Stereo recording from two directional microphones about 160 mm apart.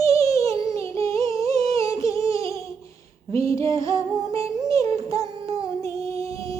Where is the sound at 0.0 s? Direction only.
20° left (ahead or behind).